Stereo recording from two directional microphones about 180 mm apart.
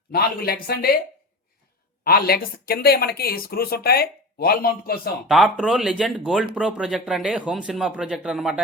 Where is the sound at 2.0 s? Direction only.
55° left (ahead or behind).